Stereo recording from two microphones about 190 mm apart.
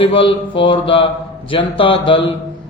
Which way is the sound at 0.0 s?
30° left (ahead or behind).